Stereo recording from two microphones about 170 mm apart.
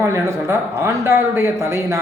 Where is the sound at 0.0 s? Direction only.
15° right (ahead or behind).